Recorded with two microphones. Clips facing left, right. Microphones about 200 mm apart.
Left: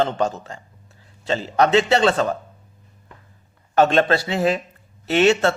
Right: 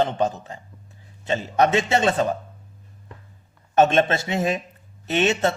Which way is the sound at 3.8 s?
20° right (ahead or behind).